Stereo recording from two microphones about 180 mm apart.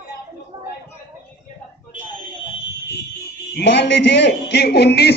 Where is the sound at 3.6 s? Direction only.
70° left (ahead or behind).